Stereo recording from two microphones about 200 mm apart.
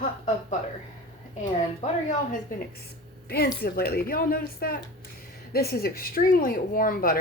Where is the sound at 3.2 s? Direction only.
50° left (ahead or behind).